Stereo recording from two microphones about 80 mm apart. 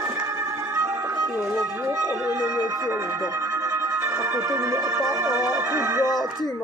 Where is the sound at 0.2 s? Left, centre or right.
Right.